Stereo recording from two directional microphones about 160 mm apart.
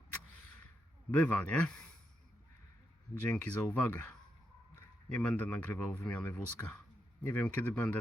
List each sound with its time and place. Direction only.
1.2 s speech: 10° left (ahead or behind)
3.2 s speech: 10° left (ahead or behind)
5.0 s speech: 5° left (ahead or behind)